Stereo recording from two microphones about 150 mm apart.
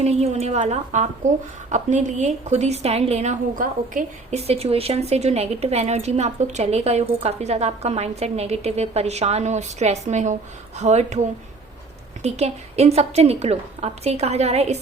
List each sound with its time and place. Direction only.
0.0 s speech: 45° right (ahead or behind); by 4.4 s 60° right (ahead or behind)
4.4 s speech: 45° right (ahead or behind)
12.2 s speech: 45° right (ahead or behind)